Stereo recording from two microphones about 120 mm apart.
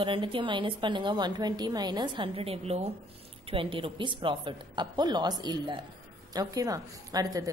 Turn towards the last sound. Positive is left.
turn(degrees=-30)  # may be behind; listen again after turning